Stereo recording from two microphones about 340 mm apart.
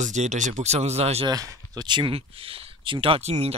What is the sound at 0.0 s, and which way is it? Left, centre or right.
Speech, right.